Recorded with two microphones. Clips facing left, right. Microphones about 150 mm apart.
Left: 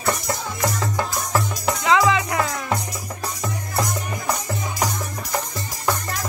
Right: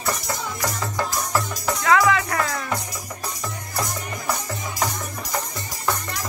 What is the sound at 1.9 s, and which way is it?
Music, 20° left (ahead or behind).